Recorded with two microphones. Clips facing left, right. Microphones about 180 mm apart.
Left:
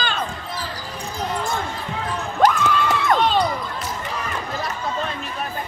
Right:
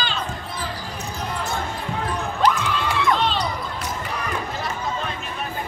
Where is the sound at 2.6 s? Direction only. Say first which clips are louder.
Left 2 dB; 50° left (ahead or behind).